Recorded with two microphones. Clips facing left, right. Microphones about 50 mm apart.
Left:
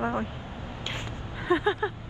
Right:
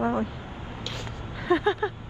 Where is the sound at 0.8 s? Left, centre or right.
Left.